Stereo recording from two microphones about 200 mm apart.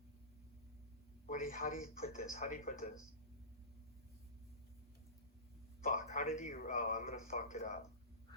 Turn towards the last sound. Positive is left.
turn(degrees=40)  # may be behind; listen again after turning